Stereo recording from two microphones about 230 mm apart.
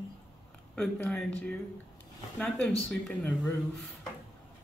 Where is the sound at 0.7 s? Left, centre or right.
Centre.